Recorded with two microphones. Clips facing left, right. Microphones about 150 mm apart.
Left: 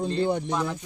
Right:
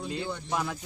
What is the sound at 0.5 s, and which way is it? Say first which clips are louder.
Speech: left 3 dB; 10° right (ahead or behind).